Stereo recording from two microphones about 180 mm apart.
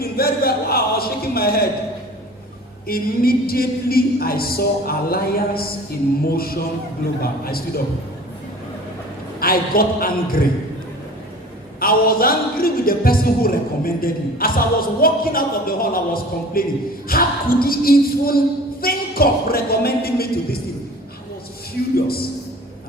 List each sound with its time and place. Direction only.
0.0 s a woman's voice: 60° left (ahead or behind)
2.8 s a woman's voice: 55° left (ahead or behind)
9.4 s a woman's voice: 55° left (ahead or behind)
11.8 s a woman's voice: 55° left (ahead or behind)
21.9 s a woman's voice: 60° left (ahead or behind)